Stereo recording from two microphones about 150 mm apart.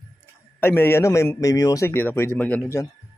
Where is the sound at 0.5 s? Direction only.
15° left (ahead or behind).